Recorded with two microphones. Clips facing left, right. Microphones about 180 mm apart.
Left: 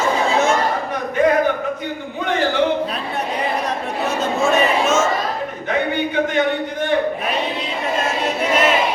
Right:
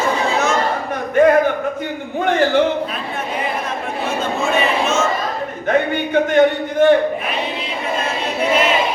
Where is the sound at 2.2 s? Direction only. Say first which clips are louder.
Right 5 dB; 50° right (ahead or behind).